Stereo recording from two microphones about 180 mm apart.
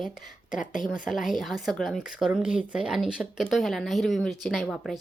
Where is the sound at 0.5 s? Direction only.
45° left (ahead or behind).